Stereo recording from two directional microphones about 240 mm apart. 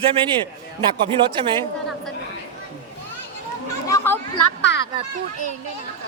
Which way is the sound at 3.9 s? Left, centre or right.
Centre.